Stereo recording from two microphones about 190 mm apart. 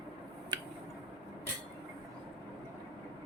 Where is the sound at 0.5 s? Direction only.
25° right (ahead or behind).